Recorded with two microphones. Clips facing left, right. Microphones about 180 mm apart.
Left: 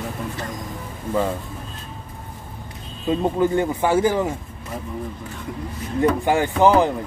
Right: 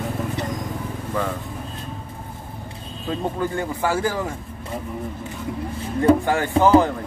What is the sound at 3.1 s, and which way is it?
Speech, 20° left (ahead or behind).